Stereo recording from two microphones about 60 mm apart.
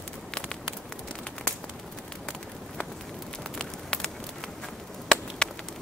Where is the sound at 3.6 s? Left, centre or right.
Centre.